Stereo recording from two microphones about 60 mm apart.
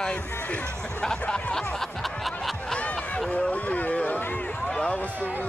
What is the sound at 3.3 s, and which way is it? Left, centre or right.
Speech, left.